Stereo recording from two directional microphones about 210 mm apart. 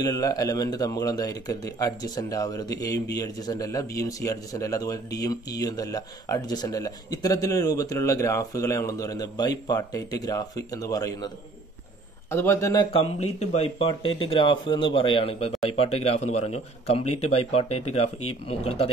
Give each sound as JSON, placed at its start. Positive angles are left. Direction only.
{"t": 0.0, "sound": "a man's voice", "side_deg": 15}
{"t": 12.9, "sound": "speech", "side_deg": 30}